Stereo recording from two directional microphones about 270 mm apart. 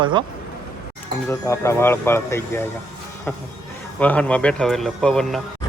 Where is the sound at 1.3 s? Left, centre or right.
Centre.